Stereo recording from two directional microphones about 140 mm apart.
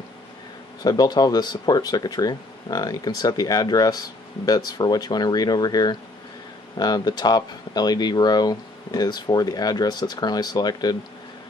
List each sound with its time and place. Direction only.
0.8 s speech: 30° left (ahead or behind)